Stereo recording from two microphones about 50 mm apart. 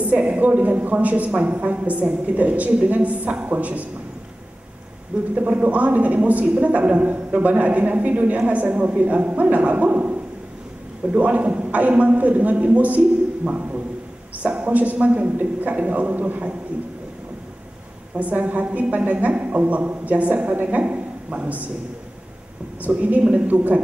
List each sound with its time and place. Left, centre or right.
0.0 s a woman's voice: right
5.3 s a woman's voice: right
11.1 s a woman's voice: right
18.1 s a woman's voice: right
22.8 s a woman's voice: right